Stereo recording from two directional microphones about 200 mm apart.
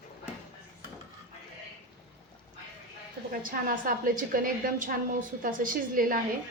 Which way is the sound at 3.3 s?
45° right (ahead or behind).